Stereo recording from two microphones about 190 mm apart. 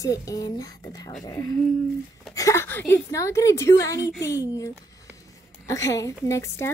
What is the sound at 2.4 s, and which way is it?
A woman's voice, 15° left (ahead or behind).